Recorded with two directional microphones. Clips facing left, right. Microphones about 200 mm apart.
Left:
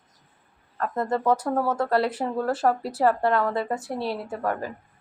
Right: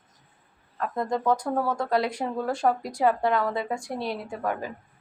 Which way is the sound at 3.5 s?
5° left (ahead or behind).